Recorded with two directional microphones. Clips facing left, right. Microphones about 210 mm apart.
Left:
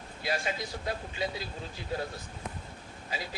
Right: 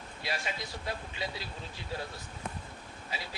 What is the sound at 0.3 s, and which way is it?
Speech, 45° left (ahead or behind).